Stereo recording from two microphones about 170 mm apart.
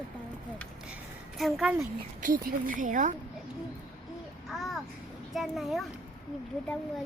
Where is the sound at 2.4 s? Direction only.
55° right (ahead or behind).